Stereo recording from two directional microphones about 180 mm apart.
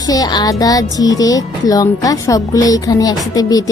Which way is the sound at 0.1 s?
20° left (ahead or behind).